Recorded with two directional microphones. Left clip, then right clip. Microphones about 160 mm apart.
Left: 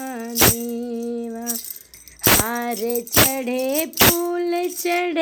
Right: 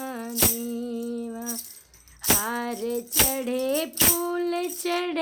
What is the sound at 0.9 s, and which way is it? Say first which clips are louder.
Music: left 5 dB; 15° left (ahead or behind).